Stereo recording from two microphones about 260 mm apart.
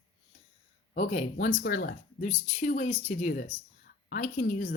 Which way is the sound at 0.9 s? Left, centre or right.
Left.